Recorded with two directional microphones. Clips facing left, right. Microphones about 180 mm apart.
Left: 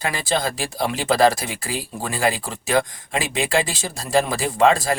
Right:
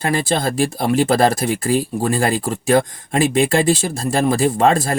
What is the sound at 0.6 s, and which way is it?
Speech, 50° right (ahead or behind).